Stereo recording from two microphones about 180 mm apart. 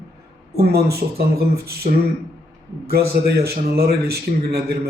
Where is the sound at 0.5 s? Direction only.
60° right (ahead or behind).